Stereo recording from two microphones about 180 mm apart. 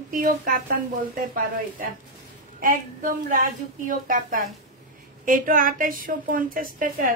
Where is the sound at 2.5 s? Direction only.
50° right (ahead or behind).